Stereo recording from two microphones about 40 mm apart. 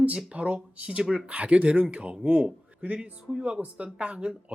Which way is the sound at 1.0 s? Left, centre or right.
Centre.